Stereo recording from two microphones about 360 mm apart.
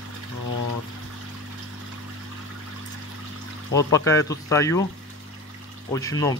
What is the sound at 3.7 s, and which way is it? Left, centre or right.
Speech, centre.